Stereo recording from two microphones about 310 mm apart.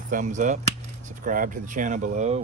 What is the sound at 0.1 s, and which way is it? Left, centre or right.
Speech, right.